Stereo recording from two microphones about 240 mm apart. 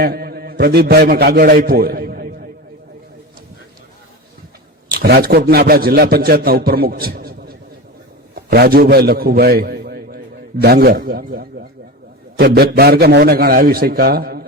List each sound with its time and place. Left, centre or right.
0.0 s a man's voice: right
4.9 s a man's voice: right